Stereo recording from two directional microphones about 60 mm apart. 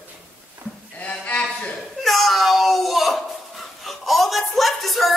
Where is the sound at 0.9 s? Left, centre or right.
Left.